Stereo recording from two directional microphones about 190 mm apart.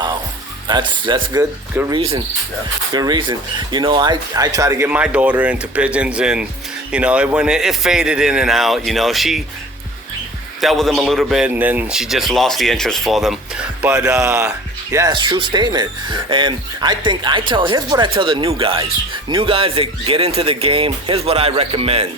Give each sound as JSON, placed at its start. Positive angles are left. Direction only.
{"t": 0.7, "sound": "a man's voice", "side_deg": -25}
{"t": 10.6, "sound": "a man's voice", "side_deg": 0}
{"t": 14.9, "sound": "speech", "side_deg": -20}